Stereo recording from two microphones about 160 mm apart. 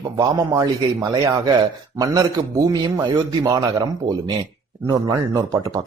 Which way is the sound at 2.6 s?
25° right (ahead or behind).